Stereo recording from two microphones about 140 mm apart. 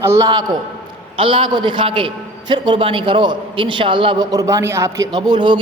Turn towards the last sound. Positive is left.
turn(degrees=-35)  # may be behind; listen again after turning